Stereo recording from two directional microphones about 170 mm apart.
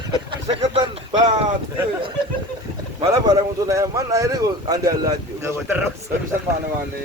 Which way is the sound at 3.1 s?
20° right (ahead or behind).